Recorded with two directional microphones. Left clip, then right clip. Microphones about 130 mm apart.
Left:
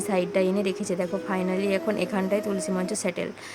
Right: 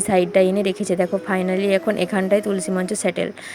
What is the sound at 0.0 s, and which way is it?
A woman's voice, 35° right (ahead or behind).